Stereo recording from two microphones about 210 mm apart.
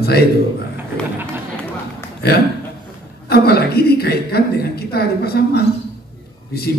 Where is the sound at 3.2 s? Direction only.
50° left (ahead or behind).